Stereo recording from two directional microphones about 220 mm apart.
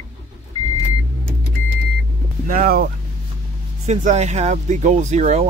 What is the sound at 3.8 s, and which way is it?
Speech, 30° right (ahead or behind).